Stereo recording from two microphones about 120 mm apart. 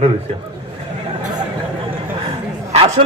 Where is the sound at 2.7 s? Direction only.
60° right (ahead or behind).